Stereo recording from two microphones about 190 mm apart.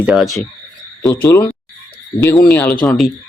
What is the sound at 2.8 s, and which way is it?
Speech, 5° left (ahead or behind).